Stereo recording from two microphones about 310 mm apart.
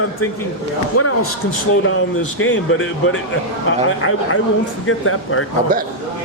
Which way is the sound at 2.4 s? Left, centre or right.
Left.